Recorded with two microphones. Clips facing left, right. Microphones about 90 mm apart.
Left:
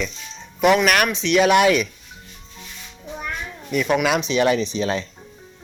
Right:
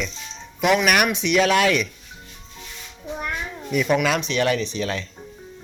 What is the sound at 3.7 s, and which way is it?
Speech, centre (ahead or behind).